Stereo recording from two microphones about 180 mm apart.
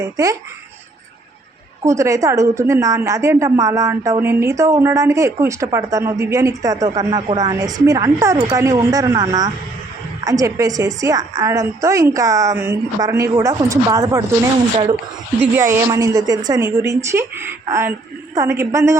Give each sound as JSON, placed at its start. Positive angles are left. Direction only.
{"t": 0.0, "sound": "a woman's voice", "side_deg": -20}
{"t": 1.8, "sound": "a woman's voice", "side_deg": -15}
{"t": 15.5, "sound": "a woman's voice", "side_deg": -15}